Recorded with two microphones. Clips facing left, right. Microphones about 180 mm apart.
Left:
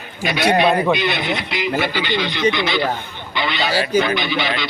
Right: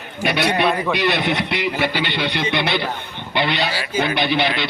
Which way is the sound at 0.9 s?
65° right (ahead or behind).